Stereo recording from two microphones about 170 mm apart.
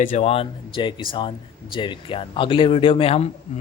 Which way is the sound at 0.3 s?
30° left (ahead or behind).